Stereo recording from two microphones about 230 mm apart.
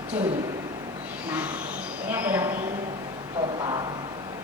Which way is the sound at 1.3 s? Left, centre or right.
Centre.